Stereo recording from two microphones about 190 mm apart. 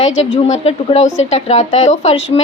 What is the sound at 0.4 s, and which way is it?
A woman's voice, 35° left (ahead or behind).